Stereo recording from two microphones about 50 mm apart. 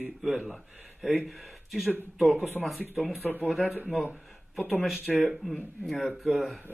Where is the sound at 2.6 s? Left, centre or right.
Right.